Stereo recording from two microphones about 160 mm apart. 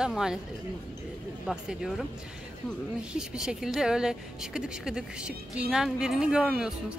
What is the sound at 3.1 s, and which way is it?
Speech, 5° right (ahead or behind).